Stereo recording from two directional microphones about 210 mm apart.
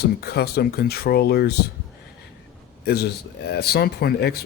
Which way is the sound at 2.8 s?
50° left (ahead or behind).